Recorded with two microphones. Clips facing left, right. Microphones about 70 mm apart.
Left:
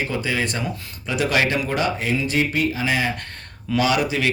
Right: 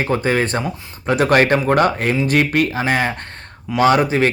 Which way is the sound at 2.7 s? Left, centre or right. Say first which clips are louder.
Right 4 dB; right.